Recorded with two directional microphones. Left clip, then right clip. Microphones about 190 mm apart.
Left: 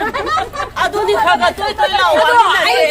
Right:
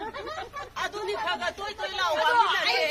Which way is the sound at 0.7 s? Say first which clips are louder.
Left 17 dB; 10° right (ahead or behind).